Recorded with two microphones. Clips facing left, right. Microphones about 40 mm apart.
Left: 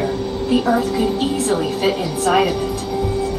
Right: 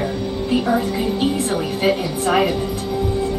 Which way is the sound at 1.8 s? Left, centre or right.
Centre.